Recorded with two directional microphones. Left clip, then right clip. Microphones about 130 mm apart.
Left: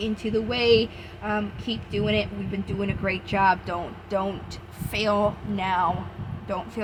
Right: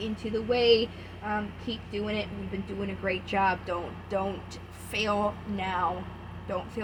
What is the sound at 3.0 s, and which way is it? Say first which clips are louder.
Speech: left 5 dB; 35° left (ahead or behind).